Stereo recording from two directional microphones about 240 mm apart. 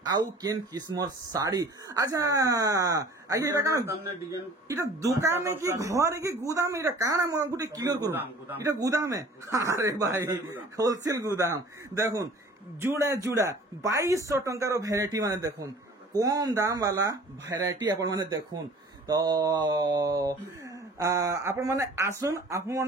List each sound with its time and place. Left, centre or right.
0.0 s speech: centre